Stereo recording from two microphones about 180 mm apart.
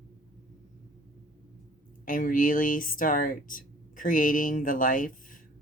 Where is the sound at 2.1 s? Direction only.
50° left (ahead or behind).